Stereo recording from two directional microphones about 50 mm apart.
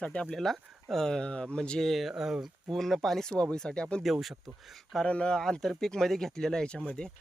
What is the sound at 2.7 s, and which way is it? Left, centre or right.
Speech, centre.